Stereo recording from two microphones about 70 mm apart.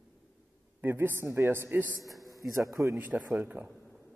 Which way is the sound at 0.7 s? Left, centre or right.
Right.